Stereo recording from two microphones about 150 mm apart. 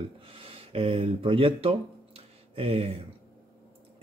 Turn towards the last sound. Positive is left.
turn(degrees=-40)  # may be behind; listen again after turning